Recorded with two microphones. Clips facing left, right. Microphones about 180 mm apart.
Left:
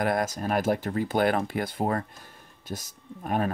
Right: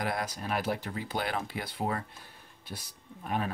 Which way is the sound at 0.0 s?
45° left (ahead or behind).